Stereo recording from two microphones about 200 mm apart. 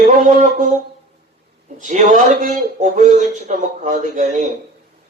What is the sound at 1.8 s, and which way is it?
Speech, 40° right (ahead or behind).